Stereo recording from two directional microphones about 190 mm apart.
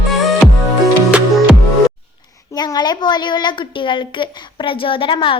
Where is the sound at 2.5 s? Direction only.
20° left (ahead or behind).